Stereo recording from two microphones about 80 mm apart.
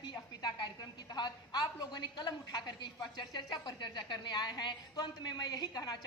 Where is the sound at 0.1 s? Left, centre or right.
Left.